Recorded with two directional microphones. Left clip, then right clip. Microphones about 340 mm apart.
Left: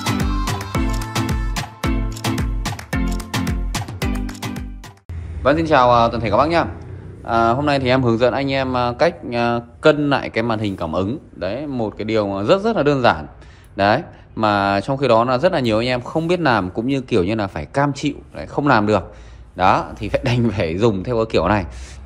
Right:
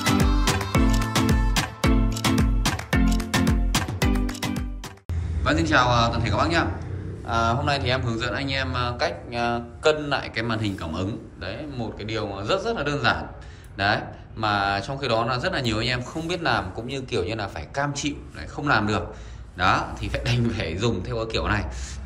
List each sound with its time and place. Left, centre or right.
0.2 s music: centre
4.0 s music: centre
5.4 s a man's voice: centre